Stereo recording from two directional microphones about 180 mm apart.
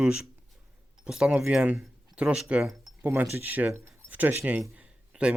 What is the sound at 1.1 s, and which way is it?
Speech, 5° right (ahead or behind).